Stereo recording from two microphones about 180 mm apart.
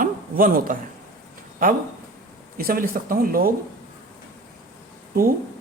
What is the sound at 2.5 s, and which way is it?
Speech, 55° right (ahead or behind).